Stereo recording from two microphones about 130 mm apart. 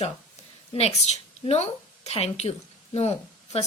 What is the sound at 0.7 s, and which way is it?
A woman's voice, 55° left (ahead or behind).